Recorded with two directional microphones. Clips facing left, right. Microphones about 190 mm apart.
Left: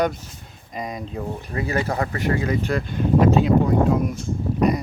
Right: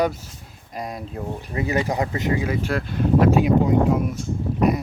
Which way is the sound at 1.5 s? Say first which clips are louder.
Right 1 dB; 20° right (ahead or behind).